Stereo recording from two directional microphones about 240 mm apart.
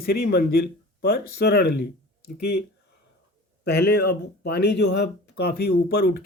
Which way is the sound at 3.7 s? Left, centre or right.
Left.